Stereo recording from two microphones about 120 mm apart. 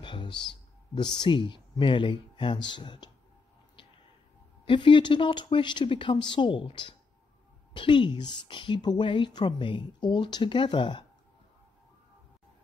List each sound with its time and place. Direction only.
0.0 s music: 40° left (ahead or behind)
0.9 s a woman's voice: 40° left (ahead or behind)
4.6 s a woman's voice: 45° left (ahead or behind)